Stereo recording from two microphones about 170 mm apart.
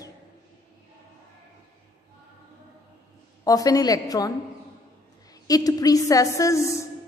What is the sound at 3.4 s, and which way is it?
Speech, 20° left (ahead or behind).